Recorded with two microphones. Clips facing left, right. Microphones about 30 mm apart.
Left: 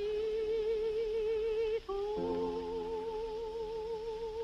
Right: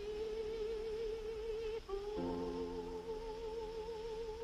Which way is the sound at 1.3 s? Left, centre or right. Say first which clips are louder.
Left 10 dB; left.